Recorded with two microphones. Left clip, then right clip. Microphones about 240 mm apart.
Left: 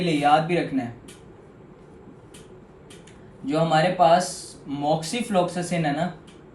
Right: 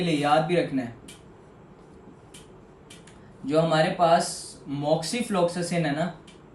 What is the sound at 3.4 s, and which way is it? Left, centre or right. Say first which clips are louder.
Speech: left 1 dB; centre.